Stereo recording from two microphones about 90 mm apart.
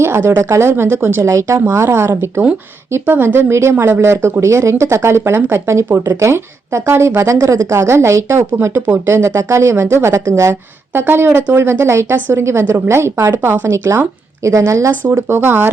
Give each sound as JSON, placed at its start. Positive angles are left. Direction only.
{"t": 0.0, "sound": "speech", "side_deg": -30}